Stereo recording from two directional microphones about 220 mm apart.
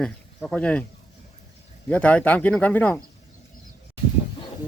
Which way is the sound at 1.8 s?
5° left (ahead or behind).